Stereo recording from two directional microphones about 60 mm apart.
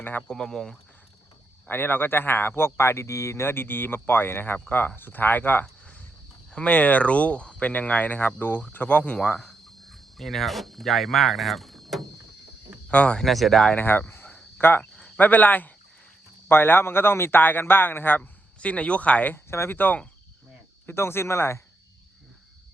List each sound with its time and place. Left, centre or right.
0.0 s speech: left
0.3 s speech: centre
1.6 s speech: left
6.5 s speech: centre
9.5 s speech: centre
12.9 s speech: left
13.2 s speech: centre
14.1 s cricket: left
14.6 s speech: left
14.9 s a sound: centre
15.2 s speech: left
18.2 s speech: left
19.5 s speech: left